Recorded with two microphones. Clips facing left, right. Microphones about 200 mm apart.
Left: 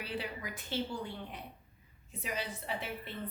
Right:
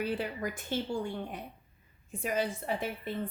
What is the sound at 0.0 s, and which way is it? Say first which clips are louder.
A woman's voice: right 7 dB; 50° right (ahead or behind).